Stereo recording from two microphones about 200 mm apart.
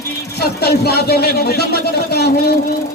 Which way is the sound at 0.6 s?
50° left (ahead or behind).